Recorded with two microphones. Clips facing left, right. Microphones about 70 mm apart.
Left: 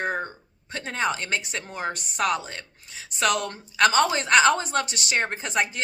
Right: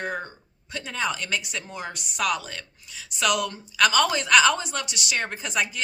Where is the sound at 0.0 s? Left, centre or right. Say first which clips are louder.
Left 3 dB; left.